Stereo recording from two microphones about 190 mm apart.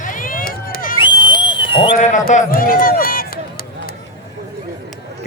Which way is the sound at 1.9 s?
40° left (ahead or behind).